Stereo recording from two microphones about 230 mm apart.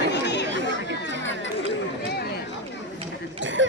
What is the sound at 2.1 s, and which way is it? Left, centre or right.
Chatter, left.